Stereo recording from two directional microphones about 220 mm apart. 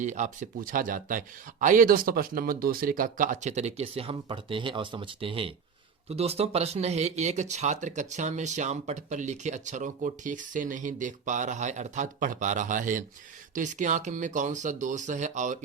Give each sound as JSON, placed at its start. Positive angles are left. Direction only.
{"t": 0.0, "sound": "speech", "side_deg": -35}